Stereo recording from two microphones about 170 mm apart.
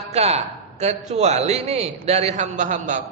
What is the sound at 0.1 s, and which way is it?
A man's voice, 40° right (ahead or behind).